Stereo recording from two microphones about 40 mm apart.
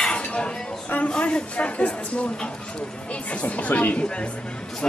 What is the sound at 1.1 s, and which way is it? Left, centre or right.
Speech, left.